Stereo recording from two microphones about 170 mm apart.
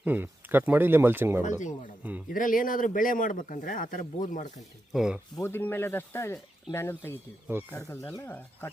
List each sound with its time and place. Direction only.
0.0 s speech: 10° right (ahead or behind)
2.3 s a man's voice: 55° left (ahead or behind)
4.9 s speech: 5° right (ahead or behind)
5.4 s speech: 15° left (ahead or behind)